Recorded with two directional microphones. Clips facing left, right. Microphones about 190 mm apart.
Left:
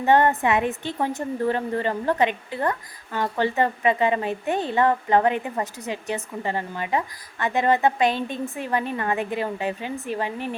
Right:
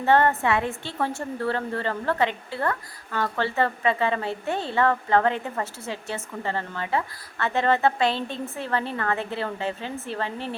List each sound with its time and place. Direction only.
0.0 s a woman's voice: 15° left (ahead or behind)